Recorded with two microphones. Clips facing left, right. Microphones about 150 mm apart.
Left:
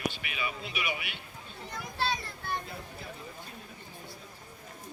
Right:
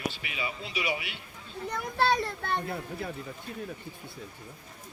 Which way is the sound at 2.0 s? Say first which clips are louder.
Right 7 dB; 60° right (ahead or behind).